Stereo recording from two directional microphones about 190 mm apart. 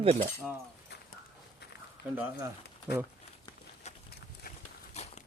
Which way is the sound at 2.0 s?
60° left (ahead or behind).